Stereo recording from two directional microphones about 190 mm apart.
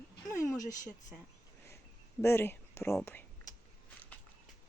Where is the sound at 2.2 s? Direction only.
15° left (ahead or behind).